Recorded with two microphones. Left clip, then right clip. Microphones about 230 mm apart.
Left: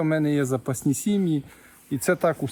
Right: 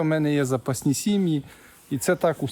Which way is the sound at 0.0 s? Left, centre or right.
Centre.